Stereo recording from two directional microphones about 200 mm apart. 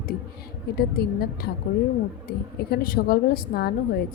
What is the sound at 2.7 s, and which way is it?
A woman's voice, 50° left (ahead or behind).